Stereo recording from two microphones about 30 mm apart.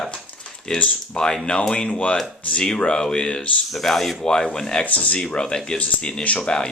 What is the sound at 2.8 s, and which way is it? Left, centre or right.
Speech, left.